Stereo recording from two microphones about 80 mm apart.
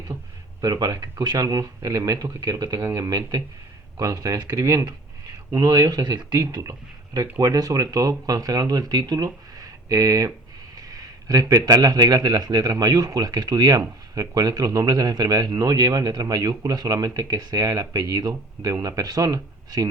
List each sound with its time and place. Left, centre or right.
0.6 s speech: right
6.4 s speech: right